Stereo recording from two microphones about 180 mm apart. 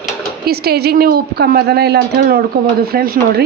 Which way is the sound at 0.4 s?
60° right (ahead or behind).